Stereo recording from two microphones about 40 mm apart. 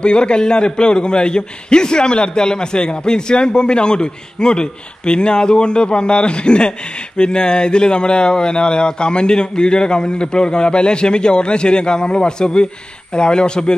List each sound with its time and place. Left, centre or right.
0.0 s a man's voice: left